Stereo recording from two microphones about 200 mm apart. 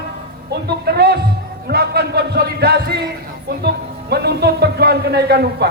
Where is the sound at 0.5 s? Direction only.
55° right (ahead or behind).